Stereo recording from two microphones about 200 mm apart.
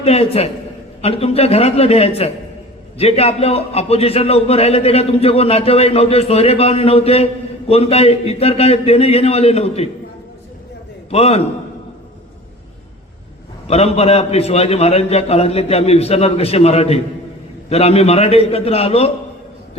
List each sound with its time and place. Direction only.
0.0 s a man's voice: 30° left (ahead or behind)
11.1 s a man's voice: 30° left (ahead or behind)
13.7 s a man's voice: 30° left (ahead or behind)